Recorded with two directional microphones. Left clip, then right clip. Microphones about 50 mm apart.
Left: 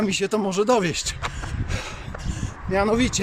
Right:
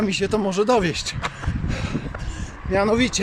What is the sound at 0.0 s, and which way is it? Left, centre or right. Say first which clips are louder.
Speech: right 1 dB; left.